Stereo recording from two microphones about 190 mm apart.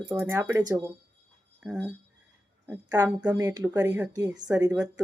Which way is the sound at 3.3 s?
20° right (ahead or behind).